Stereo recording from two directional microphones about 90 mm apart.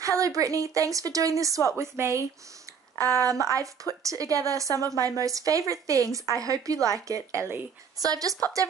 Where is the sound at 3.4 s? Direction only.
35° right (ahead or behind).